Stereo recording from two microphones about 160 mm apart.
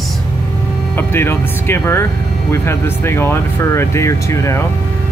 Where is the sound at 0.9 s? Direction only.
15° left (ahead or behind).